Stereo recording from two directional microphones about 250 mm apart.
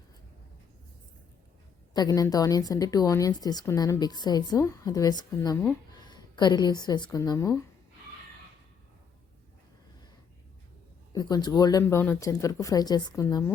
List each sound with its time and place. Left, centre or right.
1.9 s a woman's voice: centre
11.1 s a woman's voice: centre